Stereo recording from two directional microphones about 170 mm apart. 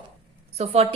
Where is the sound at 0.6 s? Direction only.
35° right (ahead or behind).